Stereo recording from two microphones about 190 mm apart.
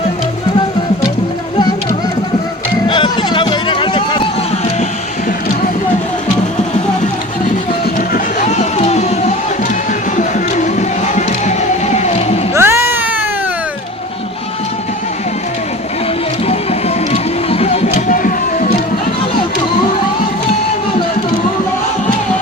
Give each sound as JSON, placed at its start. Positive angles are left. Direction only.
{"t": 2.8, "sound": "music", "side_deg": 25}
{"t": 7.9, "sound": "a sound", "side_deg": 40}
{"t": 10.2, "sound": "music", "side_deg": 40}
{"t": 12.5, "sound": "music", "side_deg": -15}
{"t": 17.1, "sound": "music", "side_deg": 35}